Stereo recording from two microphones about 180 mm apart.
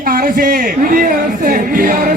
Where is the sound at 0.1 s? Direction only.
55° right (ahead or behind).